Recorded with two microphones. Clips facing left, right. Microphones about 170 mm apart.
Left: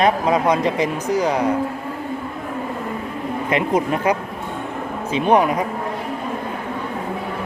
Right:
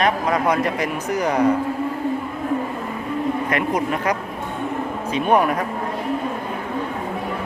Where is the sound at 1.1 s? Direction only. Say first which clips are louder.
Left 1 dB; 10° left (ahead or behind).